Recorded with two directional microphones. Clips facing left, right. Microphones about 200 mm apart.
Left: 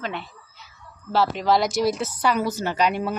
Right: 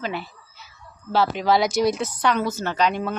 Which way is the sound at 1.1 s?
Centre (ahead or behind).